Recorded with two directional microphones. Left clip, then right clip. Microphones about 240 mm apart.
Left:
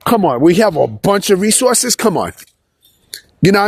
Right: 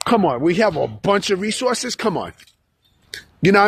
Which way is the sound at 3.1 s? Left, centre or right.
Left.